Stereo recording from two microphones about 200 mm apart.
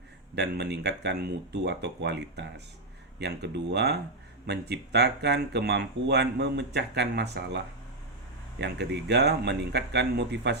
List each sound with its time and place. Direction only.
0.3 s speech: 55° right (ahead or behind)